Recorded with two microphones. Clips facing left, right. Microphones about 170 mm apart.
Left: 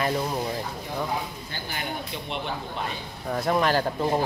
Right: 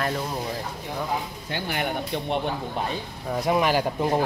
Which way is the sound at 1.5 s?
60° right (ahead or behind).